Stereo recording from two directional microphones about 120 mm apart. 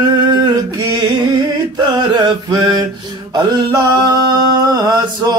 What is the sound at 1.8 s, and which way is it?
Mantra, 35° right (ahead or behind).